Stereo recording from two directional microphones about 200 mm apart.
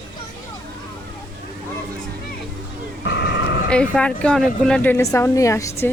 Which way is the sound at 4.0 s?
5° left (ahead or behind).